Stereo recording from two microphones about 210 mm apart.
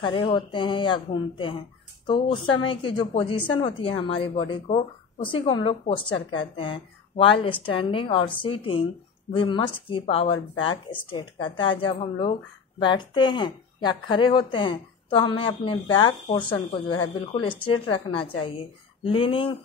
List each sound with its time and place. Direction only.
0.0 s speech: 25° left (ahead or behind)